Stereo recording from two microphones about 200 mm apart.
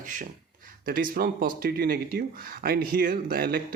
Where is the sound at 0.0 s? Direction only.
40° right (ahead or behind).